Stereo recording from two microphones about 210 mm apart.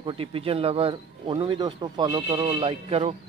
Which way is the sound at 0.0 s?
25° right (ahead or behind).